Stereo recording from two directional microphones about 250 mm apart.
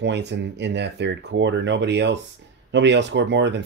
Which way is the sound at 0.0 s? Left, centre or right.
Right.